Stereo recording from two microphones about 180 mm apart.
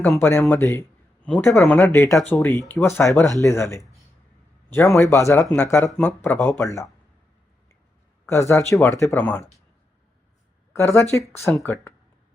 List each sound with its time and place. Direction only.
0.0 s speech: 10° left (ahead or behind)
1.2 s speech: 5° left (ahead or behind)
1.8 s speech: 15° left (ahead or behind)
8.3 s speech: 15° left (ahead or behind)
10.8 s speech: 15° left (ahead or behind)